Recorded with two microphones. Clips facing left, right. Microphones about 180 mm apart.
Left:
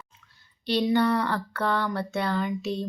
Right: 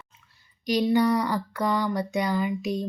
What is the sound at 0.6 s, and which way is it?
A woman's voice, 10° right (ahead or behind).